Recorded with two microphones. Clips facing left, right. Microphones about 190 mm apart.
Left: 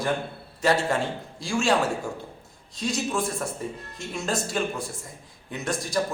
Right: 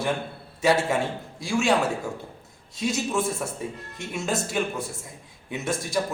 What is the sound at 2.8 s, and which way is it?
A man's voice, 5° right (ahead or behind).